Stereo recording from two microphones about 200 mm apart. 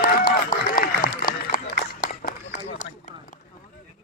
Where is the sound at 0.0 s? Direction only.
45° left (ahead or behind).